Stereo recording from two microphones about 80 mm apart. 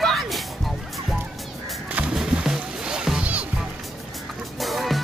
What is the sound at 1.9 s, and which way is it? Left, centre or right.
Music, centre.